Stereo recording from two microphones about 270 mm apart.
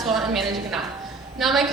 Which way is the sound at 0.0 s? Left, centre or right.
Centre.